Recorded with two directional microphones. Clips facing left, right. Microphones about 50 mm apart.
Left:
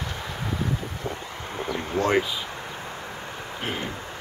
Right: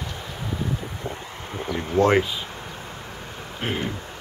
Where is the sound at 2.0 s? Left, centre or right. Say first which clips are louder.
Right 6 dB; left.